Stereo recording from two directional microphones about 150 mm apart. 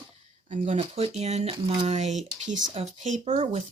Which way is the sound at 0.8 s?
40° right (ahead or behind).